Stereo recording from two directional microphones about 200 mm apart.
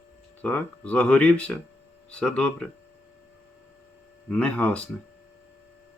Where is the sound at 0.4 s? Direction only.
5° left (ahead or behind).